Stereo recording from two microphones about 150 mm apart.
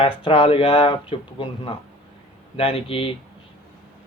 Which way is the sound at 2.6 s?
40° left (ahead or behind).